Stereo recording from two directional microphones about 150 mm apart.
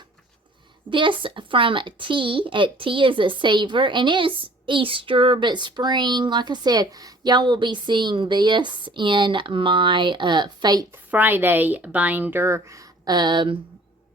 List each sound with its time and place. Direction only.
0.9 s a woman's voice: 35° right (ahead or behind)
11.1 s a woman's voice: 10° right (ahead or behind); by 13.6 s 30° right (ahead or behind)